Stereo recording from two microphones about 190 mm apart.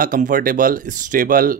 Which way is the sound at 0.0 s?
45° right (ahead or behind).